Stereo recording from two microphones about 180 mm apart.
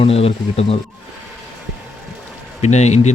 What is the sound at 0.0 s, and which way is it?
Speech, 35° left (ahead or behind).